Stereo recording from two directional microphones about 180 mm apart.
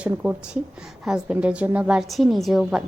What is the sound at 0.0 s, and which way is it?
A woman's voice, 10° right (ahead or behind).